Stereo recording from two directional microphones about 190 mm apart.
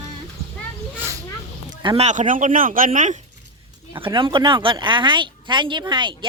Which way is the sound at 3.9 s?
25° right (ahead or behind).